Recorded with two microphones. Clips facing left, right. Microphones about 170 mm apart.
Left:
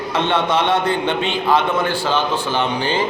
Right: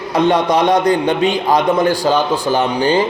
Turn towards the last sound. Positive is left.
turn(degrees=-40)  # may be behind; listen again after turning